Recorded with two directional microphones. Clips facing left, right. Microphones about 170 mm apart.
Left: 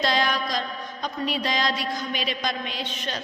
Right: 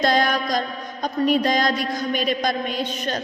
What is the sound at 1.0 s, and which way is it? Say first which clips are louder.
A woman's voice: right 8 dB; 45° right (ahead or behind).